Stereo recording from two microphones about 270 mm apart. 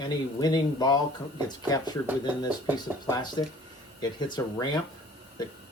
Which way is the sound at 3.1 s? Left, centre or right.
Centre.